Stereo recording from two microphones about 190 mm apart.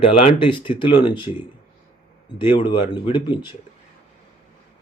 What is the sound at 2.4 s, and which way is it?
Speech, 25° left (ahead or behind).